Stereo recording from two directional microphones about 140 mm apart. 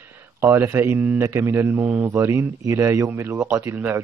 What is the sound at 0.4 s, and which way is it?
Mantra, 20° right (ahead or behind).